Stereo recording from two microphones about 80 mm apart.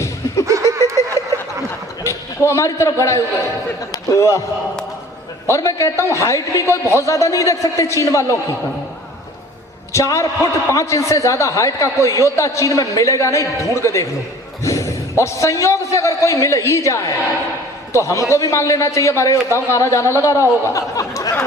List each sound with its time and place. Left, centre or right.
0.4 s snicker: right
2.0 s a man's voice: left
5.5 s a man's voice: left
9.9 s a man's voice: left
14.6 s a sound: left
15.2 s a man's voice: left
20.7 s chatter: left